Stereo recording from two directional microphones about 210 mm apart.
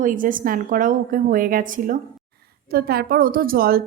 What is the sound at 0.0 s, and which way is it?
A woman's voice, 40° right (ahead or behind).